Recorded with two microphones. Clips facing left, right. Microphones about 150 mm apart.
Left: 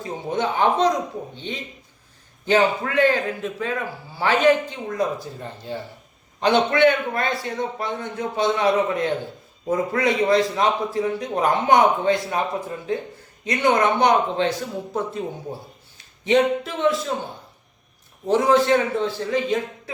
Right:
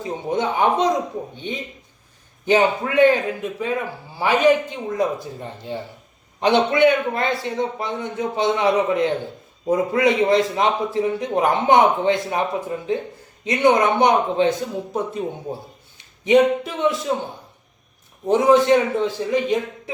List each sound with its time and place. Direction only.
0.0 s a man's voice: 20° right (ahead or behind)
18.3 s a man's voice: 15° right (ahead or behind)